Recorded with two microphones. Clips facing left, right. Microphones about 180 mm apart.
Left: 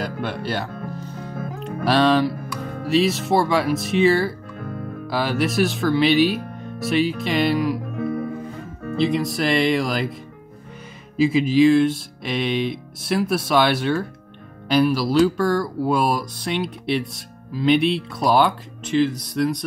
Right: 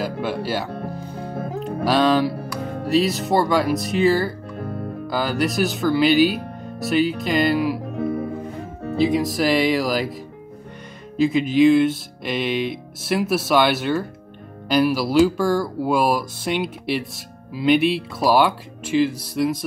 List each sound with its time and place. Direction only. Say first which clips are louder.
0.0 s speech: right 2 dB; centre (ahead or behind)
0.9 s music: right 1 dB; 10° right (ahead or behind)
1.9 s speech: left 1 dB; centre (ahead or behind)
2.3 s music: right 2 dB; 35° right (ahead or behind)
2.9 s speech: even; centre (ahead or behind)
4.6 s music: right 2 dB; 35° right (ahead or behind)
5.0 s speech: even; centre (ahead or behind)
7.8 s music: right 1 dB; 35° right (ahead or behind)
9.0 s speech: right 2 dB; centre (ahead or behind)
11.1 s speech: left 1 dB; centre (ahead or behind)